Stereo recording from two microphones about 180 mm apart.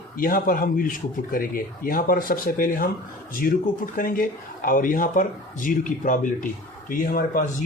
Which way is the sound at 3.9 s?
50° left (ahead or behind).